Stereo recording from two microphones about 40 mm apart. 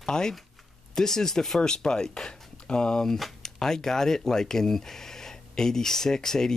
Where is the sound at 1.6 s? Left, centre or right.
Centre.